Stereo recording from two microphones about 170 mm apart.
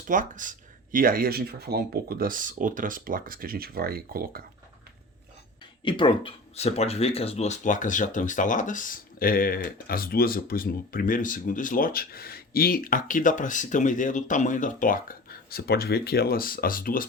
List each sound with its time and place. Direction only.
0.1 s speech: 50° right (ahead or behind)
5.8 s speech: 30° left (ahead or behind); by 17.1 s 55° left (ahead or behind)